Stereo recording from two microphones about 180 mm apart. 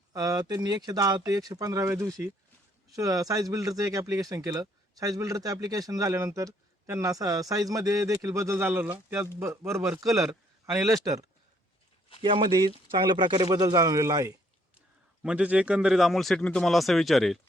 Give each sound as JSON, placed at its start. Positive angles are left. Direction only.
{"t": 0.1, "sound": "speech", "side_deg": -20}
{"t": 15.2, "sound": "speech", "side_deg": -5}